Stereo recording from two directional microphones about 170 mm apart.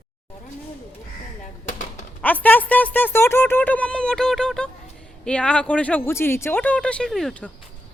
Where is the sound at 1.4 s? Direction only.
50° left (ahead or behind).